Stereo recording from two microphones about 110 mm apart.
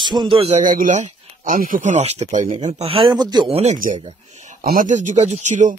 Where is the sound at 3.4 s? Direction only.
65° right (ahead or behind).